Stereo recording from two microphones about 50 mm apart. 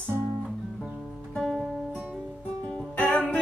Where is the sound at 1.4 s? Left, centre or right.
Centre.